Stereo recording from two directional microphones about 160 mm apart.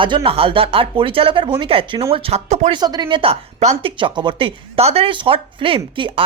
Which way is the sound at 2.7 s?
25° right (ahead or behind).